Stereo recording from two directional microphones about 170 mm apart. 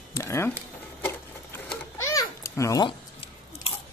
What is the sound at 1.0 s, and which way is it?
Babbling, 15° left (ahead or behind).